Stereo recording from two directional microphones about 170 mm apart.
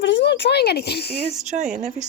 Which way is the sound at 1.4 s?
45° right (ahead or behind).